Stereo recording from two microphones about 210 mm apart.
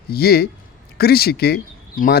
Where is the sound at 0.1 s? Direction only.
50° left (ahead or behind).